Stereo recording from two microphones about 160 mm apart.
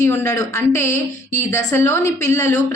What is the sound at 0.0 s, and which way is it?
A woman's voice, 15° left (ahead or behind).